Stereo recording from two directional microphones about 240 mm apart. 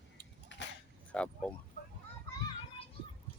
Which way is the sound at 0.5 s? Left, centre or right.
Left.